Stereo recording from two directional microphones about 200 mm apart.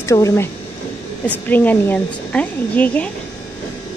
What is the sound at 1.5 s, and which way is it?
A woman's voice, 10° left (ahead or behind).